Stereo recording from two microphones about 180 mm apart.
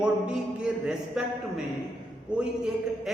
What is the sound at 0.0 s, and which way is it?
A man's voice, 5° right (ahead or behind).